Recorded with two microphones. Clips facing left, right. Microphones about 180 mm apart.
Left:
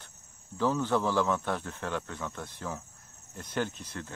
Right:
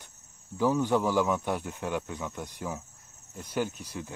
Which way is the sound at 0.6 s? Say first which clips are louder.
Right 2 dB; 10° right (ahead or behind).